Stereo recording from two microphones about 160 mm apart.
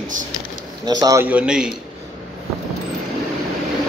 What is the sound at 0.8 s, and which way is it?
Speech, 25° right (ahead or behind).